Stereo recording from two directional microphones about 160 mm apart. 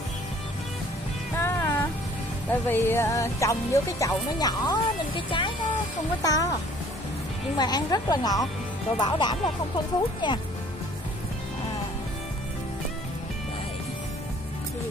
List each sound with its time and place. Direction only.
1.4 s vehicle: 15° left (ahead or behind)
2.5 s speech: 15° left (ahead or behind)
7.5 s speech: 25° left (ahead or behind)